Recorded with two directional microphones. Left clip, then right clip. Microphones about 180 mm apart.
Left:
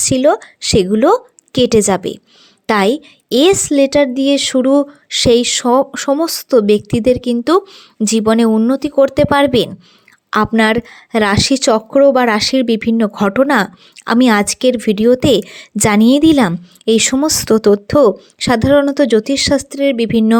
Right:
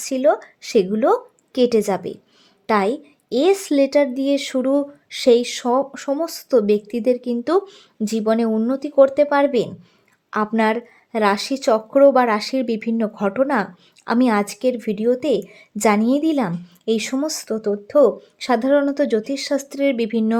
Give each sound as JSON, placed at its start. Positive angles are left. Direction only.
{"t": 0.0, "sound": "a woman's voice", "side_deg": 25}
{"t": 18.3, "sound": "speech", "side_deg": 25}
{"t": 19.7, "sound": "speech", "side_deg": 20}